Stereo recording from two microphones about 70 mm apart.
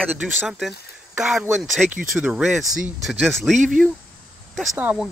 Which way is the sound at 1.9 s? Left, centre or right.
Right.